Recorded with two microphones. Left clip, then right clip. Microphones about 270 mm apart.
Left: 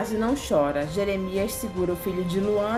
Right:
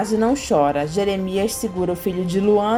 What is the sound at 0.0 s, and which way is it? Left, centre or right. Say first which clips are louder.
A woman's voice: right 7 dB; centre.